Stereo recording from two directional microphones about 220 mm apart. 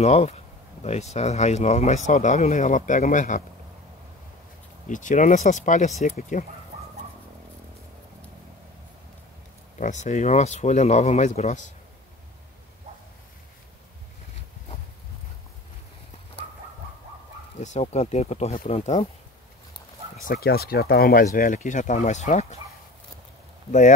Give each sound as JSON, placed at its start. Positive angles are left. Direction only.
{"t": 0.0, "sound": "speech", "side_deg": 30}
{"t": 4.8, "sound": "speech", "side_deg": 35}
{"t": 9.8, "sound": "speech", "side_deg": 35}
{"t": 17.6, "sound": "speech", "side_deg": 30}
{"t": 20.2, "sound": "speech", "side_deg": 40}